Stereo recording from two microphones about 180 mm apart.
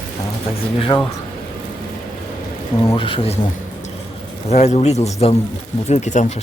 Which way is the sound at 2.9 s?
30° left (ahead or behind).